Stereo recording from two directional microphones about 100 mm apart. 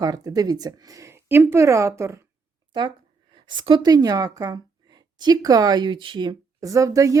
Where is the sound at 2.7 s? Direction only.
50° right (ahead or behind).